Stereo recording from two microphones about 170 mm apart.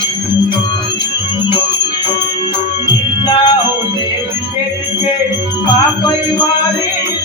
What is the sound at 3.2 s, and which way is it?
Music, 25° left (ahead or behind).